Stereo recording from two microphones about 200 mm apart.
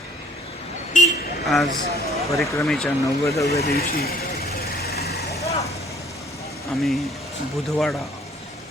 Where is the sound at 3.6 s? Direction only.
50° left (ahead or behind).